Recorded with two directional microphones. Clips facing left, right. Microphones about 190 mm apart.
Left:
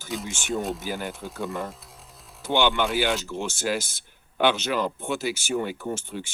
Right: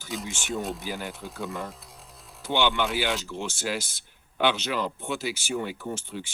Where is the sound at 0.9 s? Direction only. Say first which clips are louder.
Left 3 dB; 55° left (ahead or behind).